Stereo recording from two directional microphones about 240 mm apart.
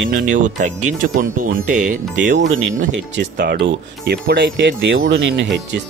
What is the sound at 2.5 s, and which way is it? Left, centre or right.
Speech, right.